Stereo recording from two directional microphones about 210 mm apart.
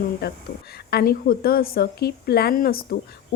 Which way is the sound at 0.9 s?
50° left (ahead or behind).